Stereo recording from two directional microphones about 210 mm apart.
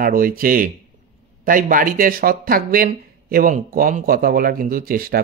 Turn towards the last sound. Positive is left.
turn(degrees=-45)  # may be behind; listen again after turning